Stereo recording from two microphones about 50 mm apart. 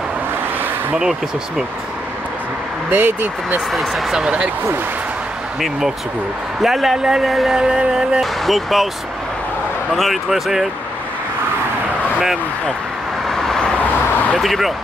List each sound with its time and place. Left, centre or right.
2.9 s speech: right
3.7 s speech: centre
4.2 s music: centre
5.6 s music: centre
7.2 s speech: centre
7.5 s music: centre
8.5 s speech: centre
9.9 s speech: centre
13.3 s vehicle: centre
13.8 s a sound: left
14.4 s speech: centre